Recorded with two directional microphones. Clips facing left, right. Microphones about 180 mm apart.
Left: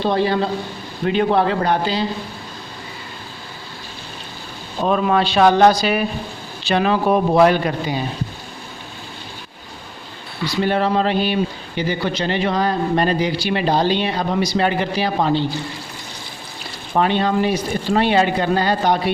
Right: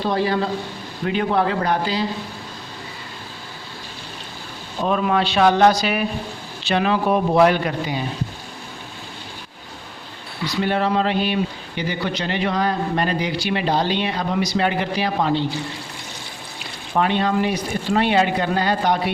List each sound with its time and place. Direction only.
0.0 s a man's voice: 25° left (ahead or behind)
4.9 s a man's voice: 35° left (ahead or behind)
10.6 s a man's voice: 35° left (ahead or behind)
16.9 s a man's voice: 35° left (ahead or behind)